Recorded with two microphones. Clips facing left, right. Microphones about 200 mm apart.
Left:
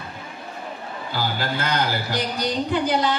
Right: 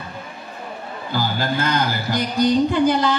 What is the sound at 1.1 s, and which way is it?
Speech, 45° right (ahead or behind).